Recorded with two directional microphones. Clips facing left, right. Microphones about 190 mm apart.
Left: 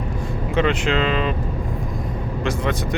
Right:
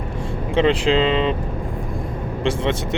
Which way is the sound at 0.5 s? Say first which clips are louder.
Right 4 dB; 30° right (ahead or behind).